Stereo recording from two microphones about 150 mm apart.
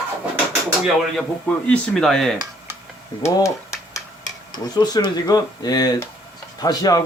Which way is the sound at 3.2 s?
20° left (ahead or behind).